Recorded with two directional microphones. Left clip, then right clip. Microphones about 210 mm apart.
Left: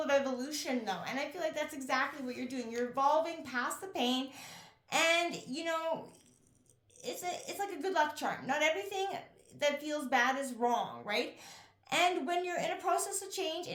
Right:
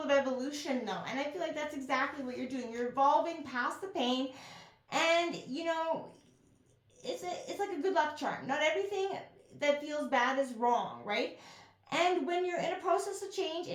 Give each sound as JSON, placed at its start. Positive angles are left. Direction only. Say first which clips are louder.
{"t": 0.0, "sound": "a woman's voice", "louder": "right 1 dB", "side_deg": 35}
{"t": 7.0, "sound": "a woman's voice", "louder": "even", "side_deg": 40}